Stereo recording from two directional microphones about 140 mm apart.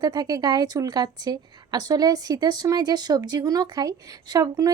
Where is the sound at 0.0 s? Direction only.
30° right (ahead or behind).